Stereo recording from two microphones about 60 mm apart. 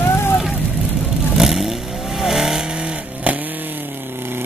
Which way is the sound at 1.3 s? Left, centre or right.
Centre.